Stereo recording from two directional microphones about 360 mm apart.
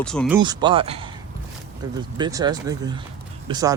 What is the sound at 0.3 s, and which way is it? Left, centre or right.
Speech, centre.